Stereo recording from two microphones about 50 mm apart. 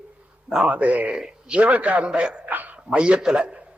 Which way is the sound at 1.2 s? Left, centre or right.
Centre.